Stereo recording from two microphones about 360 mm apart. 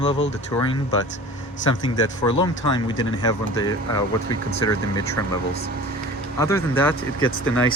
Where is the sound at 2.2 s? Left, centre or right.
Centre.